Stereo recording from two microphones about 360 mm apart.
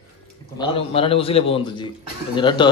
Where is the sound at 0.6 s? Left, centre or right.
Centre.